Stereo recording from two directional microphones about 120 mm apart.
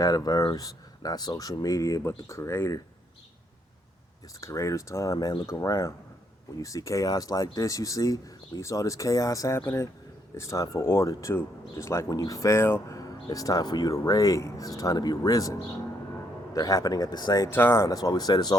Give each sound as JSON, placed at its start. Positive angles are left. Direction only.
{"t": 0.0, "sound": "speech", "side_deg": 30}
{"t": 4.4, "sound": "speech", "side_deg": 25}
{"t": 5.1, "sound": "speech", "side_deg": 40}
{"t": 16.6, "sound": "speech", "side_deg": 30}
{"t": 17.5, "sound": "speech", "side_deg": 20}